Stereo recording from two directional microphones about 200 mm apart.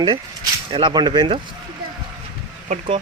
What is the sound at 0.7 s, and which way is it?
Speech, 25° right (ahead or behind).